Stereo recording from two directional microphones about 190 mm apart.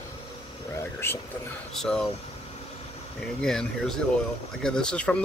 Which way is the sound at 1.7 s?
Centre (ahead or behind).